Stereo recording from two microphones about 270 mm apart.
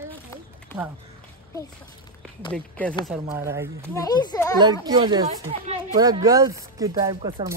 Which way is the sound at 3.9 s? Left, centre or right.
Centre.